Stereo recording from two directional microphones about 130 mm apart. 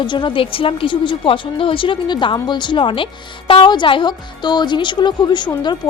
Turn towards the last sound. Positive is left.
turn(degrees=35)  # may be behind; listen again after turning